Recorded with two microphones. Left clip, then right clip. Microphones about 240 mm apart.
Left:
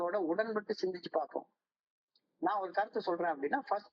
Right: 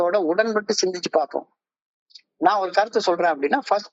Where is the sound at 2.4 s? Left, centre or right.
Right.